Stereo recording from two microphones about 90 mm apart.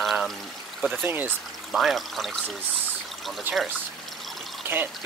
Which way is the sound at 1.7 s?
Centre (ahead or behind).